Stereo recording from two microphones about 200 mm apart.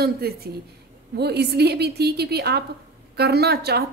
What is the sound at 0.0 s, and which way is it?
A woman's voice, 50° right (ahead or behind).